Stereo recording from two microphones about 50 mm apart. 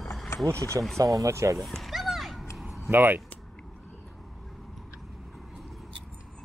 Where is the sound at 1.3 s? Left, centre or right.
Right.